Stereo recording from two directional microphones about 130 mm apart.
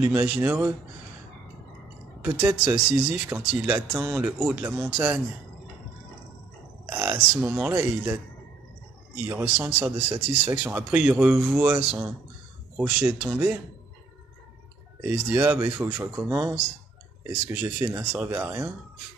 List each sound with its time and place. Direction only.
0.0 s speech: 15° right (ahead or behind)
2.2 s speech: 10° right (ahead or behind)
6.9 s speech: 15° right (ahead or behind)
9.2 s speech: 15° right (ahead or behind)
15.0 s speech: 10° right (ahead or behind)